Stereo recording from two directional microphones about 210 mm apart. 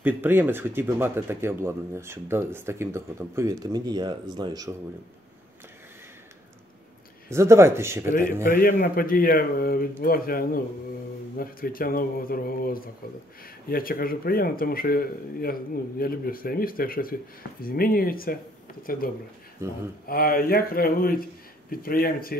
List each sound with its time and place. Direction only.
0.0 s speech: 10° right (ahead or behind)
7.2 s speech: 15° right (ahead or behind)
8.1 s speech: 40° left (ahead or behind)
19.6 s speech: 15° right (ahead or behind)
20.1 s speech: 45° left (ahead or behind)